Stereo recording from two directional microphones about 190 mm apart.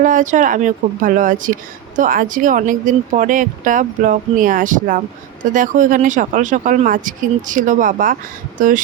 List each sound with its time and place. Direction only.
0.0 s speech: 40° right (ahead or behind)